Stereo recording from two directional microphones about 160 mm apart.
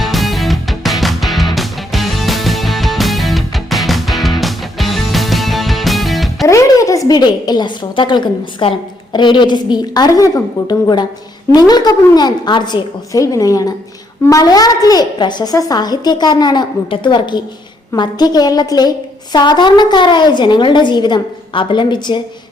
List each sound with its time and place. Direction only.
0.0 s music: centre (ahead or behind)
6.5 s a woman's voice: 20° left (ahead or behind)